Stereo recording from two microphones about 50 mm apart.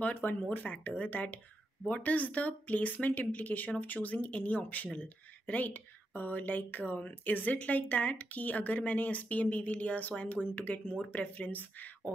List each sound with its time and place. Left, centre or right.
0.0 s speech: left